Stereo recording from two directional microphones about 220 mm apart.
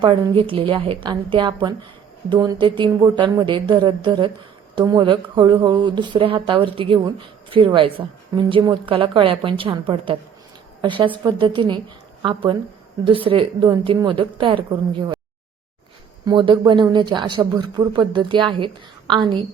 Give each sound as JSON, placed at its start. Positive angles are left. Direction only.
{"t": 0.0, "sound": "a woman's voice", "side_deg": -25}
{"t": 16.2, "sound": "speech", "side_deg": -20}